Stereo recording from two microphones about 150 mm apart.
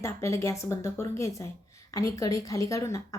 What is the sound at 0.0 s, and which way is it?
A woman's voice, 20° left (ahead or behind).